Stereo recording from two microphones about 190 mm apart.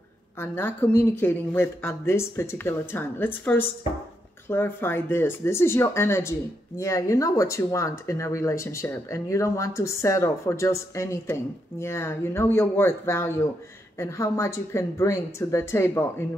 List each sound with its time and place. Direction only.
0.4 s speech: 10° left (ahead or behind)